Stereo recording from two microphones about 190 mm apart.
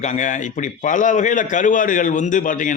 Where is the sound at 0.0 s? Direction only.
40° left (ahead or behind).